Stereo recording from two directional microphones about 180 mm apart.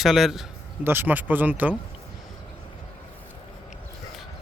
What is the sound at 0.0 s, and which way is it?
Speech, centre (ahead or behind).